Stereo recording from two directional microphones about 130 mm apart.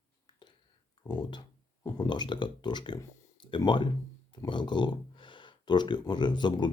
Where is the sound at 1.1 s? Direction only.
35° left (ahead or behind).